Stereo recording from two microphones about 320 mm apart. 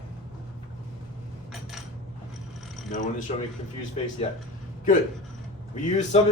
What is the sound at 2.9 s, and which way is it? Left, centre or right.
Speech, left.